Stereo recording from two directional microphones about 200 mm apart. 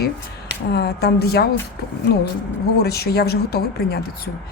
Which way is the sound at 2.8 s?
50° left (ahead or behind).